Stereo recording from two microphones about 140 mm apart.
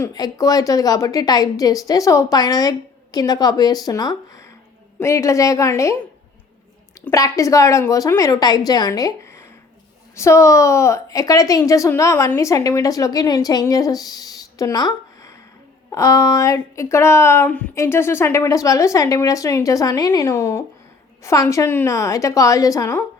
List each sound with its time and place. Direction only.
0.1 s a woman's voice: 25° left (ahead or behind)
7.1 s a woman's voice: 25° left (ahead or behind)